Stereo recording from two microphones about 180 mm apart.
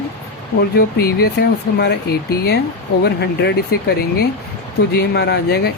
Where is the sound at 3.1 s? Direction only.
65° left (ahead or behind).